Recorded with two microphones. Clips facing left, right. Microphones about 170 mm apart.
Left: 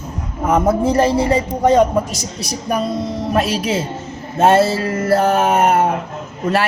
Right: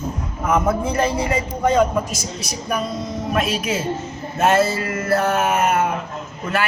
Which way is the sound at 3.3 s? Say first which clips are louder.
Left 3 dB; 35° left (ahead or behind).